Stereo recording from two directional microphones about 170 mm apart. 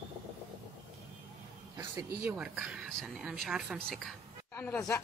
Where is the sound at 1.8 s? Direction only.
10° right (ahead or behind).